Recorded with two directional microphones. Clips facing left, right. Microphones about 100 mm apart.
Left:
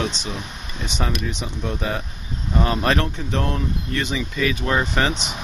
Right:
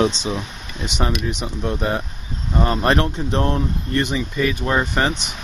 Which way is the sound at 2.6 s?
35° right (ahead or behind).